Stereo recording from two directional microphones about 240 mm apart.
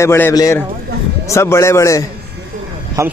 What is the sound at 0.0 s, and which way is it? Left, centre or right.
Speech, centre.